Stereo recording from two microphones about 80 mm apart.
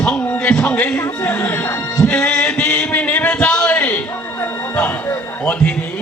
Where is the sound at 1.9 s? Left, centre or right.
Centre.